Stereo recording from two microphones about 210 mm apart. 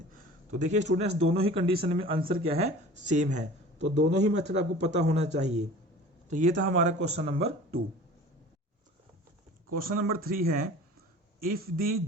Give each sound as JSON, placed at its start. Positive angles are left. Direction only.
{"t": 0.5, "sound": "speech", "side_deg": -35}
{"t": 9.7, "sound": "speech", "side_deg": -45}
{"t": 11.4, "sound": "speech", "side_deg": -45}